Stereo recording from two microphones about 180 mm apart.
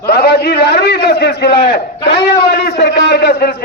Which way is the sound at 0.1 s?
65° left (ahead or behind).